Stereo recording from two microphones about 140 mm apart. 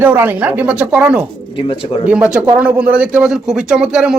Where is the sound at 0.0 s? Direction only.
15° right (ahead or behind).